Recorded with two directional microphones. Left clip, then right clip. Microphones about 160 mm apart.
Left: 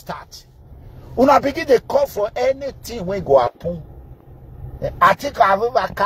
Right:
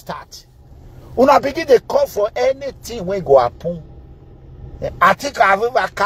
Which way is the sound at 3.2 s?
Centre (ahead or behind).